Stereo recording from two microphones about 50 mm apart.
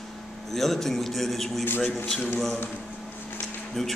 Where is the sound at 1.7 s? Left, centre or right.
Left.